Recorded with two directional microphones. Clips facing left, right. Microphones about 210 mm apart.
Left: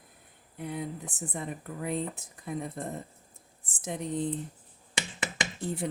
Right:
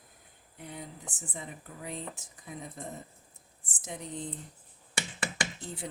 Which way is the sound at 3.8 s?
60° left (ahead or behind).